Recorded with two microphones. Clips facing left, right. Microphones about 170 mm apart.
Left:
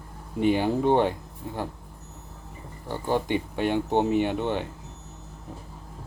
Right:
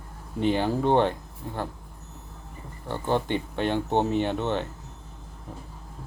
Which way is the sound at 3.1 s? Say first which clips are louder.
Even; 10° left (ahead or behind).